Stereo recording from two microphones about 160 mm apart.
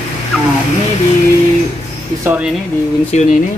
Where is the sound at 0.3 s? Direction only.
Centre (ahead or behind).